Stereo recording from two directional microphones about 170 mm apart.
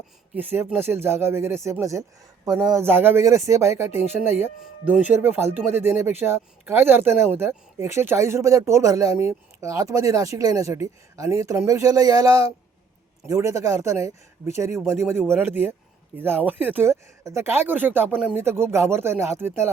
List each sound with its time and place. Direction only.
0.3 s speech: 10° right (ahead or behind)